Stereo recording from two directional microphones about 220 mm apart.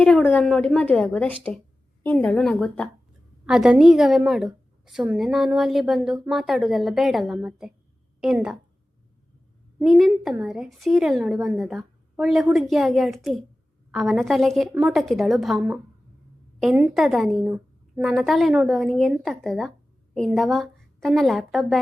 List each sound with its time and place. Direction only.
0.0 s a woman's voice: 5° left (ahead or behind)
1.3 s speech: 25° right (ahead or behind)
2.0 s a woman's voice: 5° left (ahead or behind)
9.7 s a woman's voice: centre (ahead or behind)